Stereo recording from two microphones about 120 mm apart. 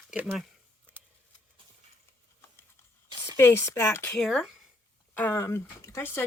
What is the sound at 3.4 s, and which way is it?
Speech, 20° left (ahead or behind).